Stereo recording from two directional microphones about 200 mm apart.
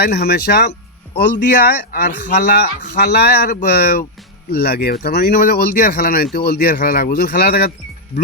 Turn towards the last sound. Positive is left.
turn(degrees=50)  # may be behind; listen again after turning